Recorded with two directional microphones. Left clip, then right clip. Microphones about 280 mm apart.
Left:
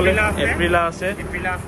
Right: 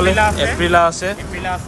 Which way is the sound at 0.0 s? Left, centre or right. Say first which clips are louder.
Right 3 dB; right.